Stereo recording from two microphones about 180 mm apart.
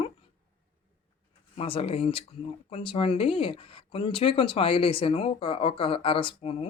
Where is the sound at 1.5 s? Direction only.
30° left (ahead or behind).